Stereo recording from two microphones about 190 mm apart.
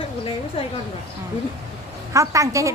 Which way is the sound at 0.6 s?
30° left (ahead or behind).